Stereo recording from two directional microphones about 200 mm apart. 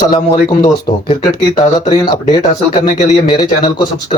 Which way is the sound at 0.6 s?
20° left (ahead or behind).